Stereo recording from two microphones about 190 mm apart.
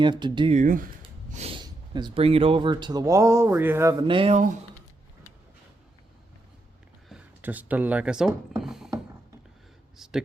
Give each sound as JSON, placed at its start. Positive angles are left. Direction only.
{"t": 0.0, "sound": "speech", "side_deg": -25}
{"t": 0.5, "sound": "speech", "side_deg": -45}
{"t": 1.3, "sound": "a sound", "side_deg": -35}
{"t": 1.5, "sound": "speech", "side_deg": -25}
{"t": 7.1, "sound": "speech", "side_deg": -10}
{"t": 8.5, "sound": "a sound", "side_deg": 0}
{"t": 10.0, "sound": "a man's voice", "side_deg": 0}